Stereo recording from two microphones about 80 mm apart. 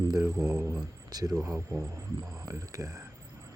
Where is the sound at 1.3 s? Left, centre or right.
Centre.